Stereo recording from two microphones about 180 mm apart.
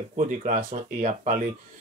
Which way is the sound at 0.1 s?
45° right (ahead or behind).